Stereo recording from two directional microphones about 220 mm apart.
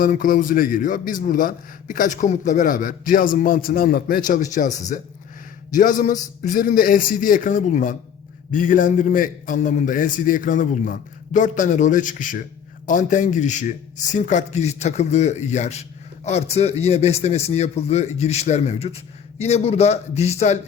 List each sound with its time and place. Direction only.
0.0 s speech: 40° left (ahead or behind)